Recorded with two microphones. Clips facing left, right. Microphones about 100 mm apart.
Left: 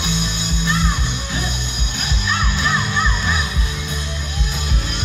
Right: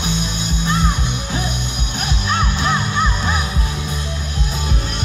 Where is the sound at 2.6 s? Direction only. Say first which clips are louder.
Even; 40° right (ahead or behind).